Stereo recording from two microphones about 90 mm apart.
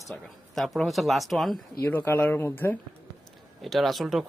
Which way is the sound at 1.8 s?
25° left (ahead or behind).